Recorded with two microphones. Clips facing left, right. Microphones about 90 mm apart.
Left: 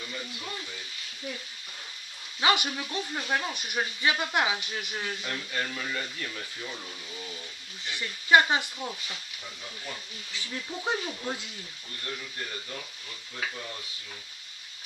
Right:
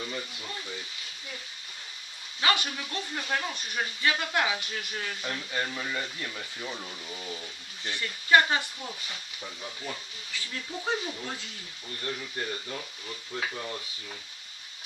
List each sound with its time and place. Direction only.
2.4 s speech: 20° left (ahead or behind)
5.2 s speech: 15° right (ahead or behind)
7.8 s speech: 20° left (ahead or behind)
10.3 s speech: 20° left (ahead or behind)